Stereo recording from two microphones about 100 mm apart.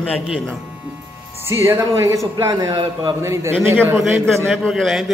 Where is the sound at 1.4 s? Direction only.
25° right (ahead or behind); by 3.1 s 45° right (ahead or behind).